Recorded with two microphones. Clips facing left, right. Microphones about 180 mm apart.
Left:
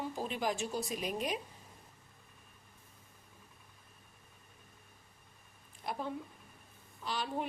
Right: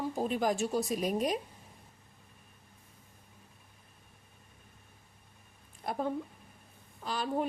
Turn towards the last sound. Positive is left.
turn(degrees=-40)  # may be behind; listen again after turning